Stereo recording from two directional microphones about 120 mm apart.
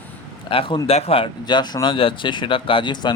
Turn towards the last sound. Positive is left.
turn(degrees=40)  # may be behind; listen again after turning